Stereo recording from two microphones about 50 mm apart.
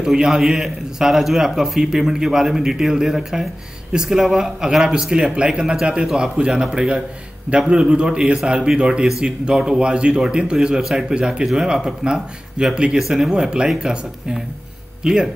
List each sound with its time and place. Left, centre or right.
0.0 s a man's voice: centre